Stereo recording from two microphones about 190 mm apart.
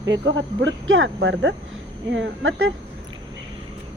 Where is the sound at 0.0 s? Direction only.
70° right (ahead or behind).